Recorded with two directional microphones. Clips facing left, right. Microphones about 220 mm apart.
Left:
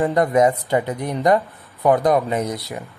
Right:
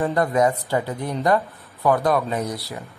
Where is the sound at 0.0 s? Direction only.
20° left (ahead or behind).